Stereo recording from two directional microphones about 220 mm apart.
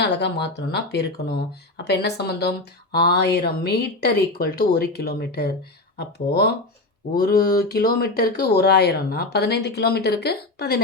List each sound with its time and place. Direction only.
0.0 s speech: 50° left (ahead or behind)